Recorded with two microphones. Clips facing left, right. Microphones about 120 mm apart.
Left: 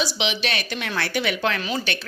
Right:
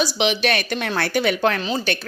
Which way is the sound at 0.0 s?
50° right (ahead or behind).